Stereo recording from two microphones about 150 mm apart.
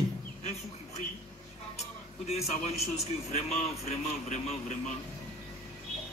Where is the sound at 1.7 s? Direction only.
45° left (ahead or behind).